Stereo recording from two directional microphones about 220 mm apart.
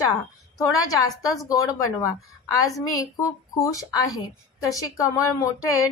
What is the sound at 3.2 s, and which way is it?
Speech, 15° left (ahead or behind).